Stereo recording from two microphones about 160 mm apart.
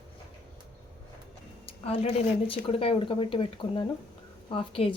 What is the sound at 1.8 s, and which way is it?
Speech, 40° left (ahead or behind).